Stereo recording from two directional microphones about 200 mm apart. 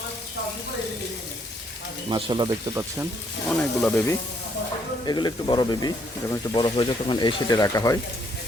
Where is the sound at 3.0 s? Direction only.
5° left (ahead or behind).